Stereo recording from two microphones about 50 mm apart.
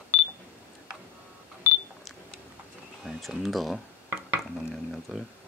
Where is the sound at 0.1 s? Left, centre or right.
Left.